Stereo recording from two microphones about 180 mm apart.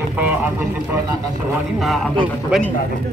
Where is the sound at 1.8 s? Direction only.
Centre (ahead or behind).